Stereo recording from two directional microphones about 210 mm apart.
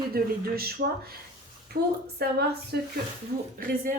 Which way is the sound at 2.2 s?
45° right (ahead or behind).